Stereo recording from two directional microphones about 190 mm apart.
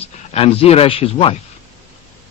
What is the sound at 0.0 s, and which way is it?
Speech, 30° left (ahead or behind).